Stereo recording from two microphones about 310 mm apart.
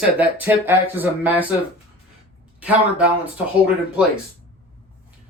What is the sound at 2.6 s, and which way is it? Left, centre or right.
Speech, centre.